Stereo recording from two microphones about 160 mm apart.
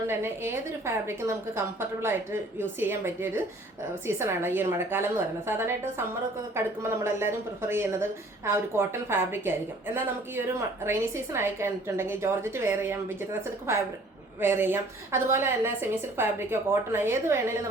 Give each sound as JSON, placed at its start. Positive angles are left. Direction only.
{"t": 0.1, "sound": "speech", "side_deg": -15}